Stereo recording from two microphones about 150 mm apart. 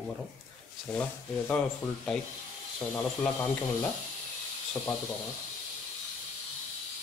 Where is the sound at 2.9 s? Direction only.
10° left (ahead or behind).